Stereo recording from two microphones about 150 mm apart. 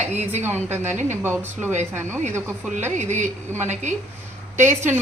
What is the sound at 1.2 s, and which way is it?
Speech, 15° right (ahead or behind).